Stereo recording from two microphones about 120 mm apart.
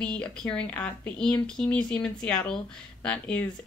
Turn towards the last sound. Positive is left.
turn(degrees=10)  # may be behind; listen again after turning